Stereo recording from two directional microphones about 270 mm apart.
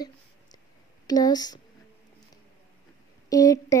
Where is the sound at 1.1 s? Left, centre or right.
Centre.